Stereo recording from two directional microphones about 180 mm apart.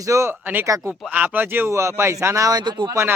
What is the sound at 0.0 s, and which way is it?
Speech, 15° right (ahead or behind).